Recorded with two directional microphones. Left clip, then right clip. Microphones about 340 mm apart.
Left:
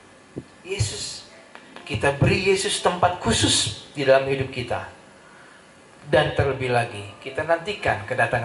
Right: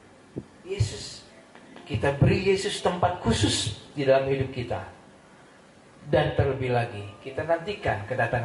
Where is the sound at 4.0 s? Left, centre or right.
Centre.